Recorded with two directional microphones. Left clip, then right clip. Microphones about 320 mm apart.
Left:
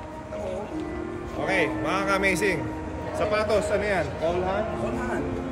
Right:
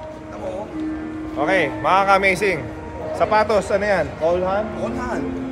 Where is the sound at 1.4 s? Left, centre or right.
Centre.